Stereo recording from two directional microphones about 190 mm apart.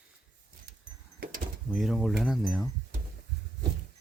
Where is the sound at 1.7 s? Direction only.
Centre (ahead or behind).